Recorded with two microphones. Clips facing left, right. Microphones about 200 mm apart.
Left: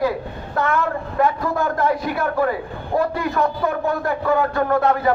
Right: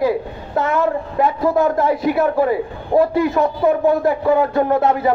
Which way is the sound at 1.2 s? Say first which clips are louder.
Right 4 dB; 25° right (ahead or behind).